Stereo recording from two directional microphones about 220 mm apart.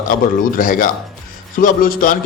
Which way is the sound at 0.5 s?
40° left (ahead or behind).